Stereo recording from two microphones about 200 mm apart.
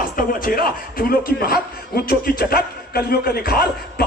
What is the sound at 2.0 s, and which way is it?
A man's voice, 50° left (ahead or behind).